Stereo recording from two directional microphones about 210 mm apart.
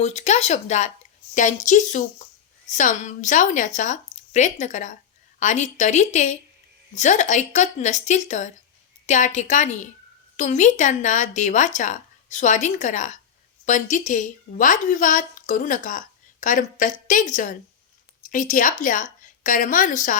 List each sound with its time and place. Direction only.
0.0 s a woman's voice: 35° left (ahead or behind)